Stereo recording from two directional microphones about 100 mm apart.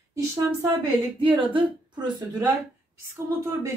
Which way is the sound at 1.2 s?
55° right (ahead or behind).